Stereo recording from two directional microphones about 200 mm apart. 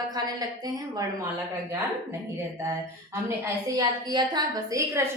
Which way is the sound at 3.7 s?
20° right (ahead or behind).